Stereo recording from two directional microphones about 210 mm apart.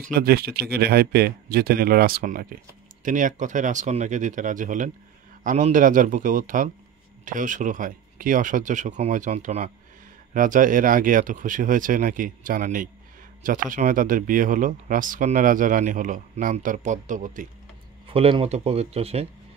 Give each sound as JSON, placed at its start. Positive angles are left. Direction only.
{"t": 0.0, "sound": "speech", "side_deg": -45}
{"t": 18.0, "sound": "speech", "side_deg": -25}